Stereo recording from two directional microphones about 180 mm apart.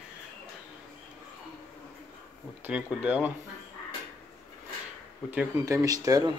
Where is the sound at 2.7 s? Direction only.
5° right (ahead or behind).